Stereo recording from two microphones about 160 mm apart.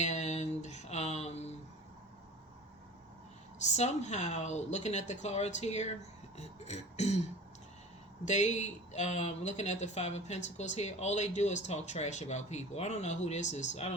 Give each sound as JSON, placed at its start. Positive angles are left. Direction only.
{"t": 0.0, "sound": "a sound", "side_deg": 45}
{"t": 3.6, "sound": "speech", "side_deg": 45}
{"t": 8.2, "sound": "speech", "side_deg": 45}